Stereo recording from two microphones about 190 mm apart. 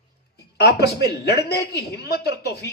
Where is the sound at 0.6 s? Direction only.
60° left (ahead or behind).